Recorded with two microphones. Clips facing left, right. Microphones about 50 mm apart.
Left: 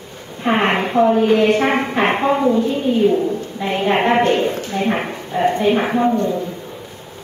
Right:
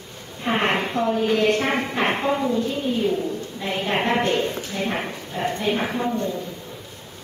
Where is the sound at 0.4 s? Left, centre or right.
Left.